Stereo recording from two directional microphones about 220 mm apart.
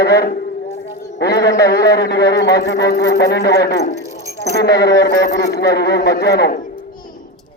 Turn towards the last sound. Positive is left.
turn(degrees=45)  # may be behind; listen again after turning